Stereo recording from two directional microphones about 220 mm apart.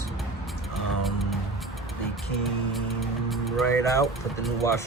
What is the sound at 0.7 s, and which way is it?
Music, centre (ahead or behind).